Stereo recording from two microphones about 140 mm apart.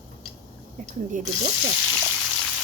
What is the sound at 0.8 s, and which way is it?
Speech, 65° right (ahead or behind).